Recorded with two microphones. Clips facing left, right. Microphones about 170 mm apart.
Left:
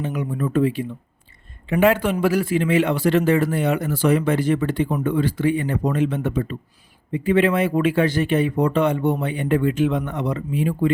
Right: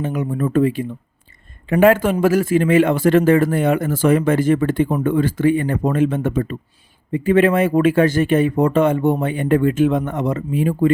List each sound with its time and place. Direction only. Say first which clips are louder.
0.0 s speech: right 4 dB; 50° right (ahead or behind)